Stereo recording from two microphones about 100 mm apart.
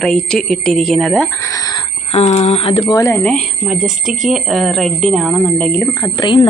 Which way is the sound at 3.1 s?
10° left (ahead or behind).